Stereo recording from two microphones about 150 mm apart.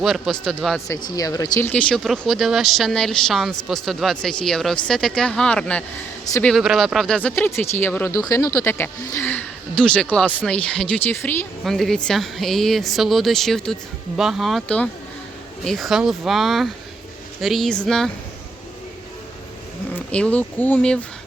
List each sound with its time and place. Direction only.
0.0 s speech: centre (ahead or behind)
1.1 s speech: 25° left (ahead or behind)
1.7 s speech: 5° left (ahead or behind)
11.6 s speech: centre (ahead or behind)
19.9 s speech: 10° left (ahead or behind)